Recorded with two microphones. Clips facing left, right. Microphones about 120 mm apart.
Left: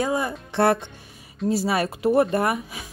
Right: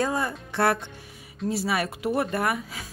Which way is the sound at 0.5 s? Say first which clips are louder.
Left 5 dB; 25° left (ahead or behind).